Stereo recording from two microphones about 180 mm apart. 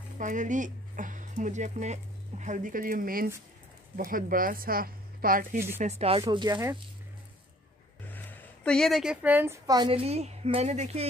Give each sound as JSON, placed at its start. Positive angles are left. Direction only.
{"t": 0.2, "sound": "speech", "side_deg": -45}
{"t": 5.8, "sound": "speech", "side_deg": -35}
{"t": 6.2, "sound": "speech", "side_deg": -25}
{"t": 8.1, "sound": "a woman's voice", "side_deg": 10}